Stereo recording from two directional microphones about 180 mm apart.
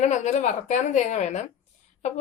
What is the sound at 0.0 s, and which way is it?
A woman's voice, 40° left (ahead or behind).